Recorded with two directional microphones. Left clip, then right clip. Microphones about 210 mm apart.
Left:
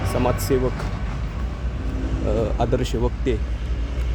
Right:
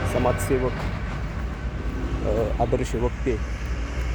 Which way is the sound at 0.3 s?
45° right (ahead or behind).